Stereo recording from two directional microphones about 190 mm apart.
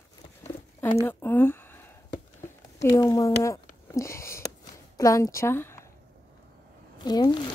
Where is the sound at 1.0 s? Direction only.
10° left (ahead or behind).